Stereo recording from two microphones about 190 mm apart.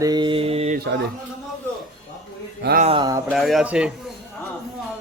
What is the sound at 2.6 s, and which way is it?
Speech, 55° right (ahead or behind).